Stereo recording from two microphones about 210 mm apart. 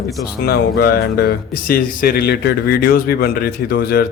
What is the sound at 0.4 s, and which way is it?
Speech, 50° left (ahead or behind).